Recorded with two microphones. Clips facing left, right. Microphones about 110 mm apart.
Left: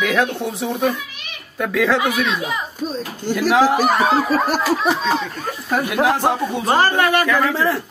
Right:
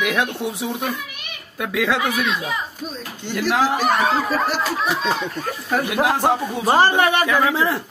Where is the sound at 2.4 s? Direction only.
20° left (ahead or behind).